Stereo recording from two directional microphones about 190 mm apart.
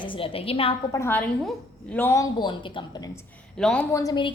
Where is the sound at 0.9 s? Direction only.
15° left (ahead or behind).